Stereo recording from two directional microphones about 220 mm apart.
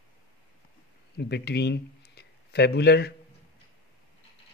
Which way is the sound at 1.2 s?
50° left (ahead or behind).